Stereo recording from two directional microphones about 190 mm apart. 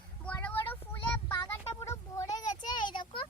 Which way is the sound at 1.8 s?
15° left (ahead or behind).